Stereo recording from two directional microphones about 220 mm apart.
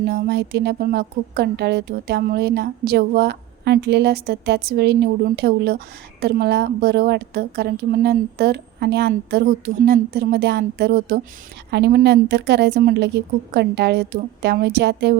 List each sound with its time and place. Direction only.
0.0 s a woman's voice: 45° right (ahead or behind)